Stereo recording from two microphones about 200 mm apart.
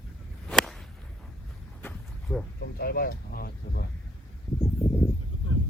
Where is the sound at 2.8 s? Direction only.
50° left (ahead or behind).